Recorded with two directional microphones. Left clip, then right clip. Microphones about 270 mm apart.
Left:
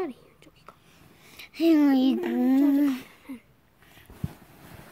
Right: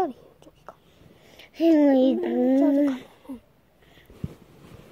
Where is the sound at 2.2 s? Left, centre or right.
Left.